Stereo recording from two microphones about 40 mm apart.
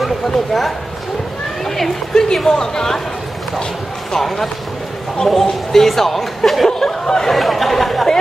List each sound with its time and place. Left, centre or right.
0.0 s speech: centre
2.1 s speech: centre
4.1 s speech: centre
6.7 s speech: centre
7.3 s speech: centre